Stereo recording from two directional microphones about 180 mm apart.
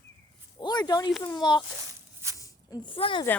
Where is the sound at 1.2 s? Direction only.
25° left (ahead or behind).